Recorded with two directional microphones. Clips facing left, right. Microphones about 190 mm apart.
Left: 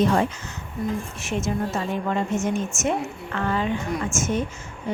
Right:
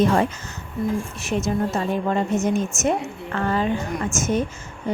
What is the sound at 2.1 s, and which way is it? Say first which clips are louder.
Speech: right 2 dB; 35° right (ahead or behind).